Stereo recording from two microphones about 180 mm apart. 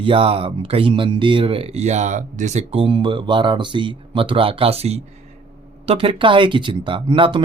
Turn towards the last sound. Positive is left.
turn(degrees=-30)  # may be behind; listen again after turning